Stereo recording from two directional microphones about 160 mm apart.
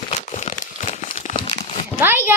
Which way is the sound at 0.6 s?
45° left (ahead or behind).